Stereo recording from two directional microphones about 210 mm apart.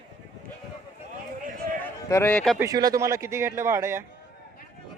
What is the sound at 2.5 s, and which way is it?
A man's voice, 15° right (ahead or behind).